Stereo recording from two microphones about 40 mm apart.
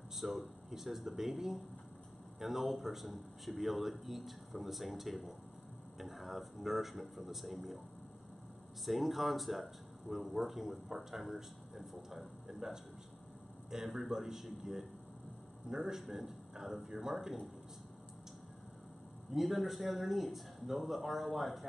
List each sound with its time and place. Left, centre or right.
0.1 s a man's voice: centre
8.8 s a man's voice: centre
19.3 s speech: centre